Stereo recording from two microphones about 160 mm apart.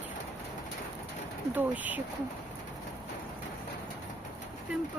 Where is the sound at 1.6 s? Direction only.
10° right (ahead or behind).